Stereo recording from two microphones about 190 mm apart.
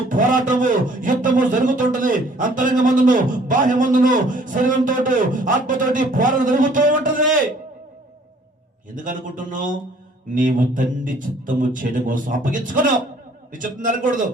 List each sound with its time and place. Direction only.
0.1 s a man's voice: 45° right (ahead or behind)
9.0 s a man's voice: 45° right (ahead or behind)